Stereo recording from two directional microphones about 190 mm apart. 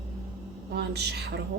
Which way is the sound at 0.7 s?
60° right (ahead or behind).